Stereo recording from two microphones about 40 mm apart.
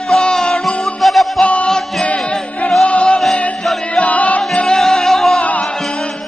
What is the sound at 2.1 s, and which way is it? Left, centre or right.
Music, centre.